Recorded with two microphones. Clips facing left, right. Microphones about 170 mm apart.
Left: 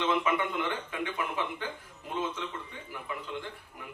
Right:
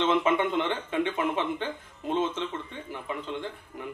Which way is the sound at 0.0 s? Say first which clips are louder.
Right 5 dB; 25° right (ahead or behind).